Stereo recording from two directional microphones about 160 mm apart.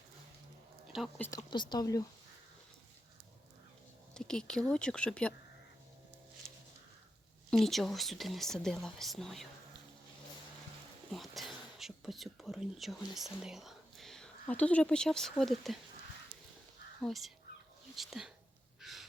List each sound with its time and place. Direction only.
0.9 s speech: centre (ahead or behind)
1.7 s speech: 25° left (ahead or behind)
4.1 s speech: 5° left (ahead or behind)
7.5 s speech: centre (ahead or behind)
11.1 s speech: centre (ahead or behind)
17.0 s speech: centre (ahead or behind)
18.8 s crow: centre (ahead or behind)